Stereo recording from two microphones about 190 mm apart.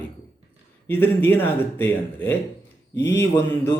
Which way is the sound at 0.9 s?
10° left (ahead or behind).